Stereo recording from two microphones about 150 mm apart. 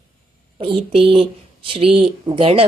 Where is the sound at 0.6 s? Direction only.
35° right (ahead or behind).